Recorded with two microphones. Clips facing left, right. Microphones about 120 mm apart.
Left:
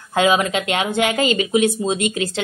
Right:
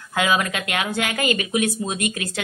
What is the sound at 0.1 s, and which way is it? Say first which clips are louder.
A woman's voice: left 5 dB; 25° left (ahead or behind).